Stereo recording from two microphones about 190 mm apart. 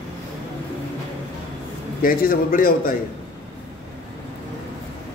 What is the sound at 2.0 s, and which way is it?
Speech, 45° left (ahead or behind).